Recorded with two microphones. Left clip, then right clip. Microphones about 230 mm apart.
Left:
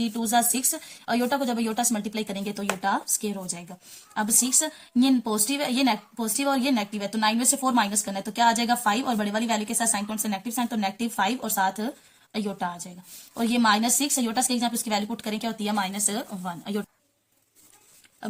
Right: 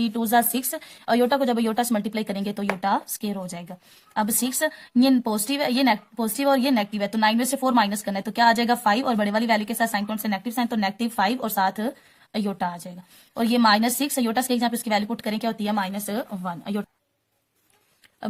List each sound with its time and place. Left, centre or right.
0.0 s a woman's voice: right